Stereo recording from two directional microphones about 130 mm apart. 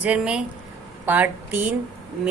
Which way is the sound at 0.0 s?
10° right (ahead or behind).